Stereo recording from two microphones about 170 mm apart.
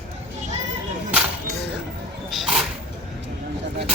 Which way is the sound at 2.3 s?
Centre (ahead or behind).